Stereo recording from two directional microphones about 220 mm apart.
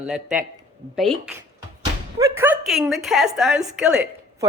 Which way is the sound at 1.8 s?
15° right (ahead or behind).